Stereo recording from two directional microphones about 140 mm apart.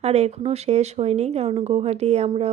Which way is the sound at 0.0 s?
50° right (ahead or behind).